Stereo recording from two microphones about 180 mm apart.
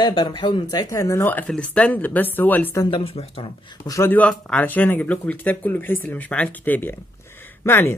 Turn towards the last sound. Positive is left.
turn(degrees=15)  # may be behind; listen again after turning